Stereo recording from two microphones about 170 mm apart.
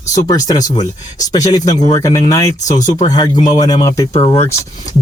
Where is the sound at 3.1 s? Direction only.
20° left (ahead or behind).